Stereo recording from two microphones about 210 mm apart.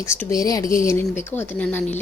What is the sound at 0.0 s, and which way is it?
A woman's voice, 10° left (ahead or behind).